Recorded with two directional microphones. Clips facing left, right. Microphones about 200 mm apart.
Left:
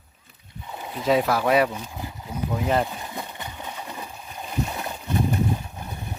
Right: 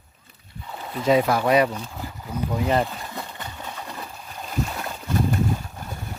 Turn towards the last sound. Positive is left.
turn(degrees=15)  # may be behind; listen again after turning